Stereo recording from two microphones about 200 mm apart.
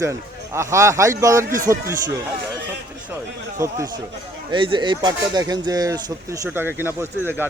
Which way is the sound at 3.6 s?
15° right (ahead or behind).